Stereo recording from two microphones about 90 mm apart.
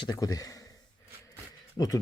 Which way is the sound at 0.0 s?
50° left (ahead or behind).